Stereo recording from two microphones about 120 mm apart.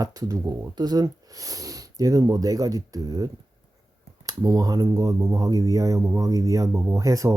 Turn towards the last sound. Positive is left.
turn(degrees=-25)  # may be behind; listen again after turning